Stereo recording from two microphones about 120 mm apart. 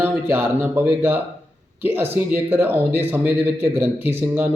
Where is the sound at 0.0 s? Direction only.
20° right (ahead or behind).